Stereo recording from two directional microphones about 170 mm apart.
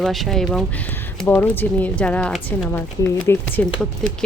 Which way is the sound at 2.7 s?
15° left (ahead or behind).